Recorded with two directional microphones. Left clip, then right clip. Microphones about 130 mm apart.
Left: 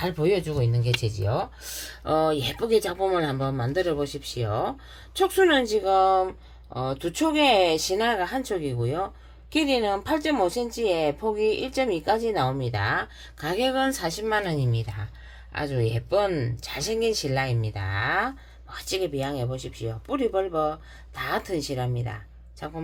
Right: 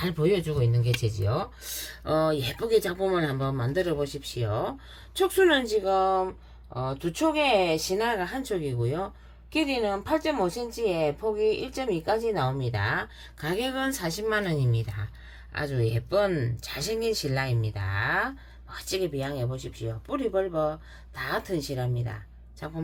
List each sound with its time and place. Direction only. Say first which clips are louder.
0.0 s a woman's voice: left 2 dB; 15° left (ahead or behind)
9.5 s a woman's voice: left 3 dB; 30° left (ahead or behind)